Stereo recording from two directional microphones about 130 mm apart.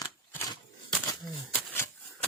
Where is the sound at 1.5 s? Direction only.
20° left (ahead or behind).